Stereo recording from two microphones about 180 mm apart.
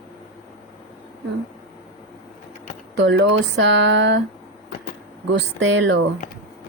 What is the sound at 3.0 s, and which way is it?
Speech, 80° right.